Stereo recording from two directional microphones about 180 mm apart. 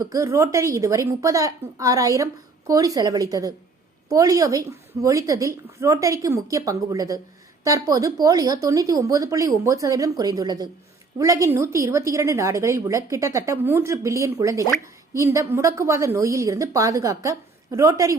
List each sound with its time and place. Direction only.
0.0 s a woman's voice: 15° right (ahead or behind)